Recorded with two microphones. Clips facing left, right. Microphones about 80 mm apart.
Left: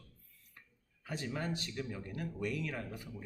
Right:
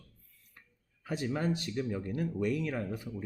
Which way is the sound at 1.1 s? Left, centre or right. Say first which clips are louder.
Right 6 dB; centre.